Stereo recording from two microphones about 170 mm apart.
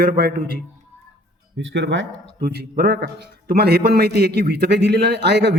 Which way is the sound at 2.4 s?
65° right (ahead or behind).